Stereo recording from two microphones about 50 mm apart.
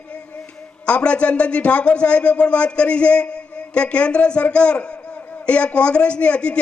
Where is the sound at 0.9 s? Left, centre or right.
Left.